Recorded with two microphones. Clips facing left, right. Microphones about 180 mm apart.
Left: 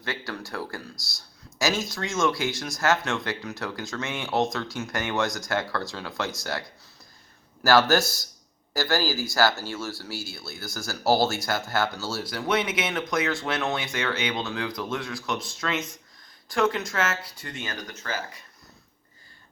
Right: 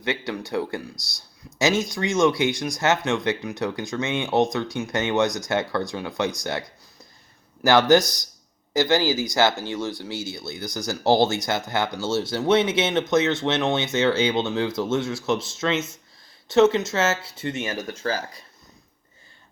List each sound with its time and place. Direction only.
0.0 s speech: 20° right (ahead or behind); by 18.4 s 35° right (ahead or behind)